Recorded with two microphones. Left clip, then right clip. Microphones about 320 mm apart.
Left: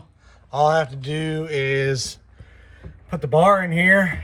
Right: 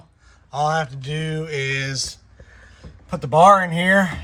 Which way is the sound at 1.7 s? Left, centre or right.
Left.